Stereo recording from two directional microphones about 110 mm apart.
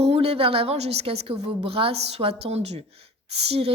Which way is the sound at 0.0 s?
60° right (ahead or behind).